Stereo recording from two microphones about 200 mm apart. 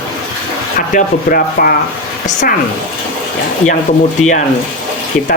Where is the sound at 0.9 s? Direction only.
45° left (ahead or behind).